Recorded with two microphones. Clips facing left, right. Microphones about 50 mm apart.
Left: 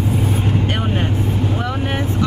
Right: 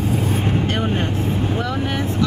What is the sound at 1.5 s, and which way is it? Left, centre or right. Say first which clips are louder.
Speech: even; left.